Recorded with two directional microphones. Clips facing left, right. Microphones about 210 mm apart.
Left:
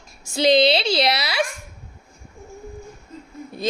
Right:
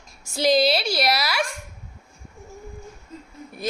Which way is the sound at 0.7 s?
20° left (ahead or behind).